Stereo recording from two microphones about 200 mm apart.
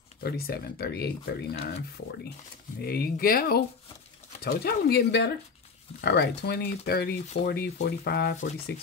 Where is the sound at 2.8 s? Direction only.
50° left (ahead or behind).